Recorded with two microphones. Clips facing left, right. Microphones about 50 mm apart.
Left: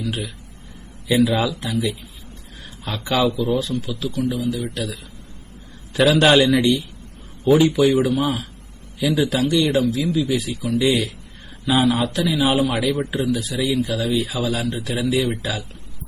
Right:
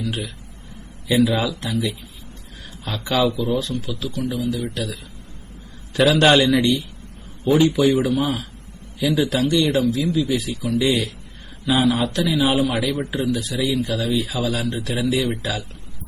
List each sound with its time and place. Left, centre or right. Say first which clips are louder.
0.0 s speech: even; centre
3.1 s speech: left 1 dB; centre
12.9 s a man's voice: left 2 dB; left
13.1 s speech: even; centre